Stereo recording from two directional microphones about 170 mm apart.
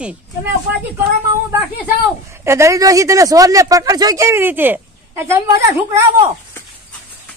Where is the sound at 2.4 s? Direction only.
15° right (ahead or behind).